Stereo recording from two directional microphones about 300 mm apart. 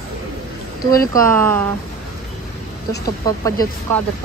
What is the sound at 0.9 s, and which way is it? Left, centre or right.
Speech, centre.